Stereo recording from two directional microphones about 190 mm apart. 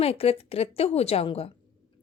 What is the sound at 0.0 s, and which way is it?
A woman's voice, 30° left (ahead or behind).